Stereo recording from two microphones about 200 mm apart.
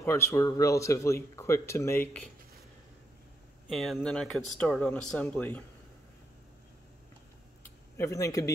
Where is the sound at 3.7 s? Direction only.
Centre (ahead or behind).